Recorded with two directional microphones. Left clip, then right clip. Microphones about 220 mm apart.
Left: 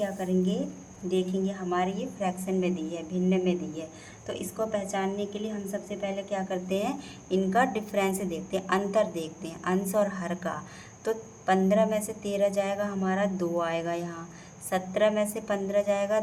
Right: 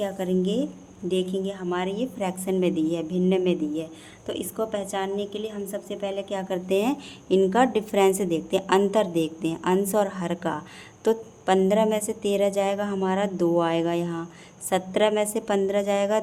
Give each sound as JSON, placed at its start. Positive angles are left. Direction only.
{"t": 0.0, "sound": "a woman's voice", "side_deg": -55}